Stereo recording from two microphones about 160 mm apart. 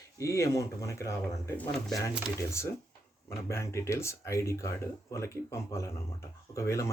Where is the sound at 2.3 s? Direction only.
15° left (ahead or behind).